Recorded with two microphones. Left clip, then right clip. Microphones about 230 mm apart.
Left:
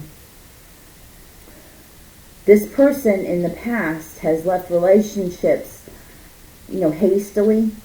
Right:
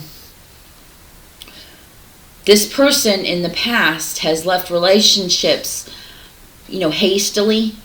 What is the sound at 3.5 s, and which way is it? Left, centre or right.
A woman's voice, centre.